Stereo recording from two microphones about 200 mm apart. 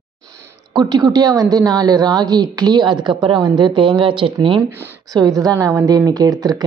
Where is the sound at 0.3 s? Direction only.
20° right (ahead or behind).